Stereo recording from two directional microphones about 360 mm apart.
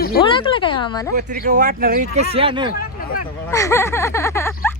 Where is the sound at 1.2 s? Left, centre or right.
Right.